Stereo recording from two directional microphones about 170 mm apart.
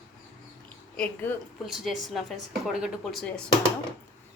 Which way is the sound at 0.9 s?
10° left (ahead or behind).